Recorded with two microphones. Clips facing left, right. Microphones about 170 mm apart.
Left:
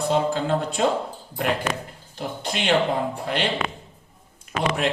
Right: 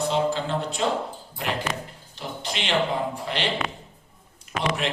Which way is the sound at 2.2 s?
50° left (ahead or behind).